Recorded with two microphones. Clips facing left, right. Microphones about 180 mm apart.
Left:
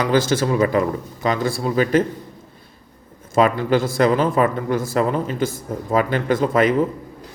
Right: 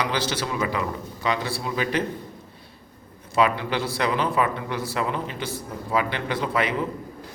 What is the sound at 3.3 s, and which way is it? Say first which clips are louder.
A man's voice: left 6 dB; 45° left (ahead or behind).